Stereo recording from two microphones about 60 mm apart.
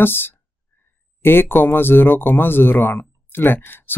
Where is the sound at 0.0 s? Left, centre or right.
Left.